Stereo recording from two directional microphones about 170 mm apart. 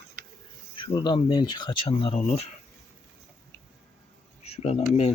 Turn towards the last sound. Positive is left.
turn(degrees=35)  # may be behind; listen again after turning